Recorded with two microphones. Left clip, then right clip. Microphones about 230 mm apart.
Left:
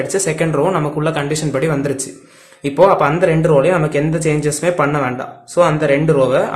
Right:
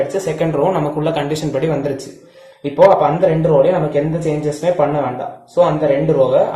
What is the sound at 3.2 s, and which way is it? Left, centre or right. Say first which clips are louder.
Speech: even; left.